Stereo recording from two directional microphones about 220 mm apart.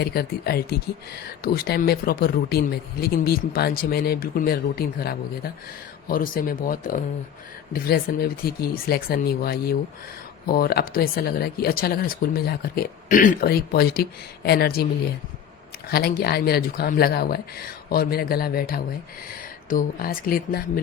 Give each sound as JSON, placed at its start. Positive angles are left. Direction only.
{"t": 0.0, "sound": "speech", "side_deg": 45}
{"t": 15.9, "sound": "speech", "side_deg": 45}